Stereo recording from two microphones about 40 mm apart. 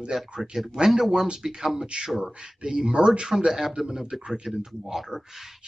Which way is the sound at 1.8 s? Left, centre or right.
Right.